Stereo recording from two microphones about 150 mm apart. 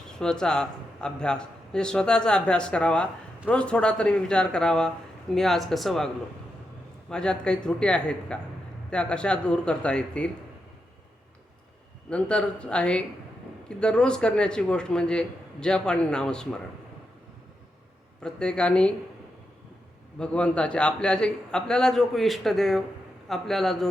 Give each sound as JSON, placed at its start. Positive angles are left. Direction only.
{"t": 0.2, "sound": "a man's voice", "side_deg": 5}
{"t": 7.1, "sound": "speech", "side_deg": 5}
{"t": 12.1, "sound": "a man's voice", "side_deg": 5}
{"t": 18.2, "sound": "a man's voice", "side_deg": 5}
{"t": 20.1, "sound": "a man's voice", "side_deg": 5}